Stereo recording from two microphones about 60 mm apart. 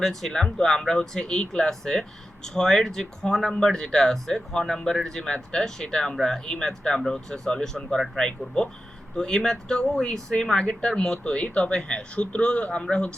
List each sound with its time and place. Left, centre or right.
0.0 s speech: centre